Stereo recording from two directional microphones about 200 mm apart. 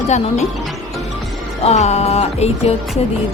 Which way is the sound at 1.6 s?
30° left (ahead or behind).